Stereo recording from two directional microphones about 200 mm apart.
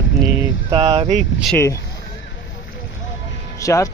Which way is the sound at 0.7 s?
30° right (ahead or behind).